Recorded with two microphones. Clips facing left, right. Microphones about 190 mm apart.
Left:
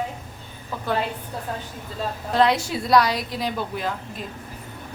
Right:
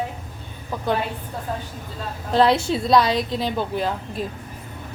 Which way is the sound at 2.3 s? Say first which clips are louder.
Right 3 dB; 30° right (ahead or behind).